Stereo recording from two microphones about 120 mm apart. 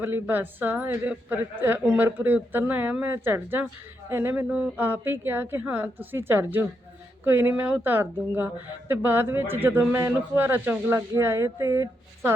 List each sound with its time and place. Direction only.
0.0 s a woman's voice: 15° right (ahead or behind)